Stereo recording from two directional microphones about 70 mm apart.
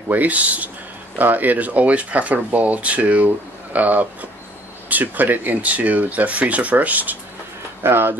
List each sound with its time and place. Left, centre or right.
0.1 s speech: right